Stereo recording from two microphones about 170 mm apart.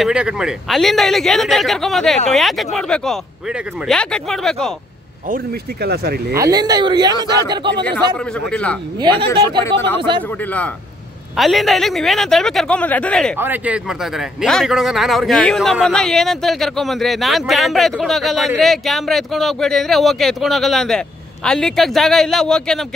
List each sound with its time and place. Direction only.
0.0 s a man's voice: 5° right (ahead or behind)
5.3 s speech: 65° right (ahead or behind)
6.3 s speech: 20° right (ahead or behind)
8.5 s speech: 5° left (ahead or behind)
9.2 s speech: 30° right (ahead or behind)
10.4 s a man's voice: 10° left (ahead or behind)
13.4 s a man's voice: 10° right (ahead or behind)